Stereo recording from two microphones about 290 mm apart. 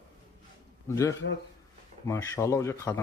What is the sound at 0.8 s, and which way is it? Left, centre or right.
Speech, centre.